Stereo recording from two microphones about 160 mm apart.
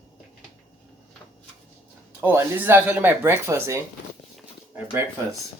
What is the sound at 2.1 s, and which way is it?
Speech, 10° right (ahead or behind).